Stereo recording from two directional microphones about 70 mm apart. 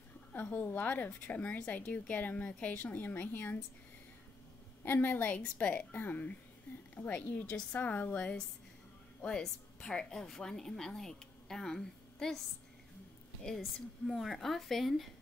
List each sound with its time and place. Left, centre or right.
0.3 s a woman's voice: left
4.8 s a woman's voice: left
9.8 s a woman's voice: centre
13.6 s a woman's voice: centre